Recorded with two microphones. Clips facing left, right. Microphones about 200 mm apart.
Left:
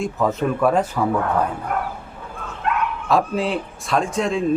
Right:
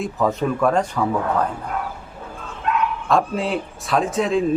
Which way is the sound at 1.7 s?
55° left (ahead or behind).